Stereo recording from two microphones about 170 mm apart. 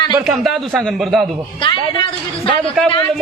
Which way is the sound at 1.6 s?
30° left (ahead or behind).